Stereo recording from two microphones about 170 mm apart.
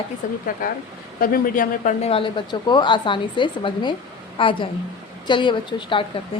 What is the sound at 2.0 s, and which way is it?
A woman's voice, 30° left (ahead or behind).